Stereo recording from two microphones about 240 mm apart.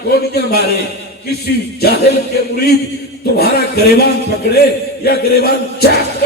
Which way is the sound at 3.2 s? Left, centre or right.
Left.